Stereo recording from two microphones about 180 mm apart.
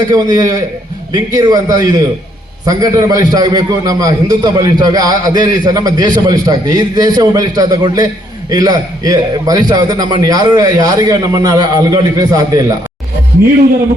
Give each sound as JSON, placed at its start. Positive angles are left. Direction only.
{"t": 0.1, "sound": "a man's voice", "side_deg": -20}